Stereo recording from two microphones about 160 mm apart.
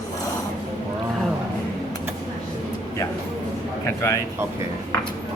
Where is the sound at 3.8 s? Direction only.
20° left (ahead or behind).